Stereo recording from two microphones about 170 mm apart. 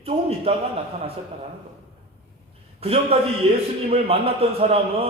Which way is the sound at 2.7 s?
35° right (ahead or behind).